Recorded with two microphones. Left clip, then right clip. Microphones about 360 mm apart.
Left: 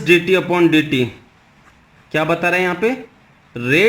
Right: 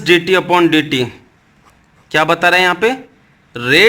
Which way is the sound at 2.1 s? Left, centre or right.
Right.